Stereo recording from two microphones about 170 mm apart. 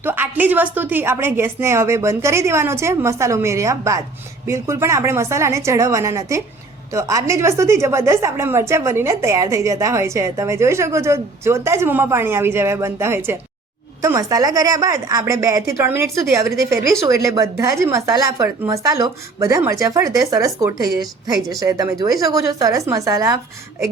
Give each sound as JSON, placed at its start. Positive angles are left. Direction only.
{"t": 0.0, "sound": "a woman's voice", "side_deg": -10}